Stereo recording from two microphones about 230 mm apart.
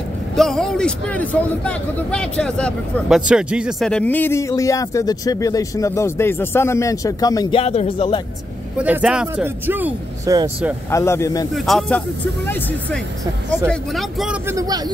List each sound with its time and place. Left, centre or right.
0.4 s speech: centre
7.6 s speech: left
8.7 s speech: centre
10.9 s speech: centre
11.5 s speech: centre
13.7 s speech: centre
14.5 s speech: centre